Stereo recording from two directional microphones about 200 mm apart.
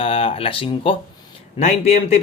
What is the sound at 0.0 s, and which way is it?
Speech, 30° left (ahead or behind).